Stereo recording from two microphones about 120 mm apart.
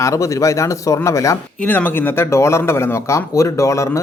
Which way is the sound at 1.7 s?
15° left (ahead or behind).